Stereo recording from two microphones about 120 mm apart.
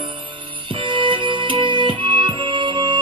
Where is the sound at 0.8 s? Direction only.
45° right (ahead or behind).